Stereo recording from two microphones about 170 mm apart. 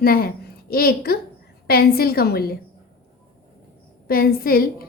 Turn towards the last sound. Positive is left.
turn(degrees=60)  # may be behind; listen again after turning